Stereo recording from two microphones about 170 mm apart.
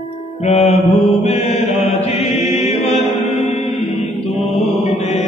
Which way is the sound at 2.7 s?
35° left (ahead or behind).